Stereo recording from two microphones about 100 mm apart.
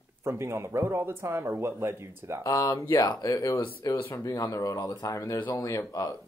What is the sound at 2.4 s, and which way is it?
Speech, 35° left (ahead or behind).